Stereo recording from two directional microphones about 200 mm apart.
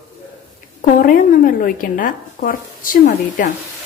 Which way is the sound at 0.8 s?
45° left (ahead or behind).